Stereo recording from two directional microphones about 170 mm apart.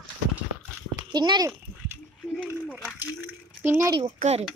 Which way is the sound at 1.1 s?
25° right (ahead or behind).